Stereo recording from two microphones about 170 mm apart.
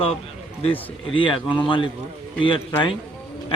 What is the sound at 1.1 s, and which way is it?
A man's voice, 30° left (ahead or behind).